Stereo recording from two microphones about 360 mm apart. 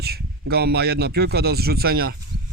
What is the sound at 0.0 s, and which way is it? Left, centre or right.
A man's voice, right.